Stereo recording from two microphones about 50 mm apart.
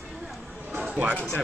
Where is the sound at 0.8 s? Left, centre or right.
Centre.